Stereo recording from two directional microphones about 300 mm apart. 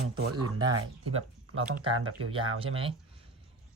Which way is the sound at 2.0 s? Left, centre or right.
Right.